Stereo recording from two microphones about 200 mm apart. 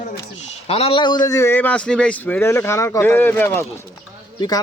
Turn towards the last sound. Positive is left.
turn(degrees=20)  # may be behind; listen again after turning